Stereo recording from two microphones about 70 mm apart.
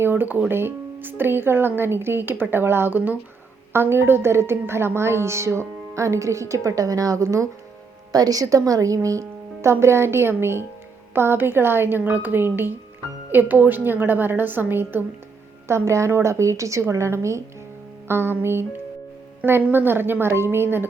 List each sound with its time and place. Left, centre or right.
0.0 s a woman's voice: right
8.1 s a woman's voice: right
15.6 s a woman's voice: right
19.7 s a woman's voice: right